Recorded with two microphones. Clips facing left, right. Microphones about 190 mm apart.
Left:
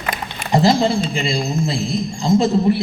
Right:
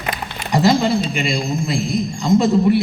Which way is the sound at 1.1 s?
30° left (ahead or behind).